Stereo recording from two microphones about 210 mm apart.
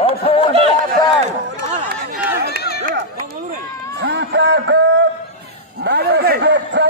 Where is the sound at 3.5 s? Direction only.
55° right (ahead or behind).